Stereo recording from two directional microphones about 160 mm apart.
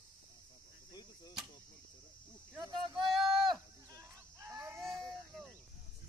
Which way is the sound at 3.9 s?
20° right (ahead or behind).